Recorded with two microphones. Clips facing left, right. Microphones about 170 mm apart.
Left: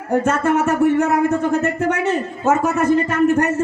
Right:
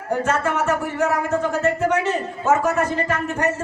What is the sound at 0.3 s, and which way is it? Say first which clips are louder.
Speech: left 3 dB; 50° left (ahead or behind).